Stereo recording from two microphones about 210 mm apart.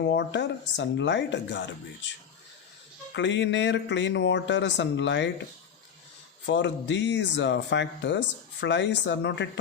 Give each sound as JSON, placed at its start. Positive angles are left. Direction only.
{"t": 0.0, "sound": "speech", "side_deg": 55}
{"t": 6.4, "sound": "speech", "side_deg": 60}